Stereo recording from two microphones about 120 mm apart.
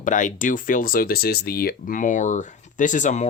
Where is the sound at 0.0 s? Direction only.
90° left.